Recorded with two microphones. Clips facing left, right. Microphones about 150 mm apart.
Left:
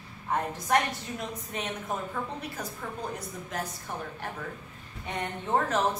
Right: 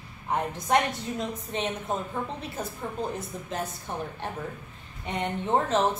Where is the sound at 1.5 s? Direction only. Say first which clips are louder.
Right 3 dB; 25° right (ahead or behind).